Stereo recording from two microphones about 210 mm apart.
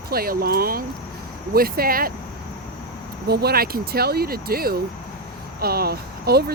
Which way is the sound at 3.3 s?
50° right (ahead or behind).